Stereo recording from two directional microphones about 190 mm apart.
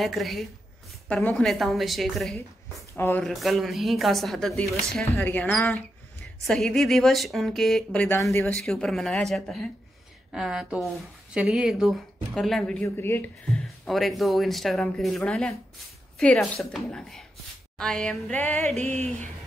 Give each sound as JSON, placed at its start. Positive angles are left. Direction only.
{"t": 0.0, "sound": "a woman's voice", "side_deg": 0}
{"t": 12.8, "sound": "speech", "side_deg": 10}
{"t": 13.8, "sound": "a woman's voice", "side_deg": 0}
{"t": 18.8, "sound": "a sound", "side_deg": -35}
{"t": 19.0, "sound": "speech", "side_deg": 10}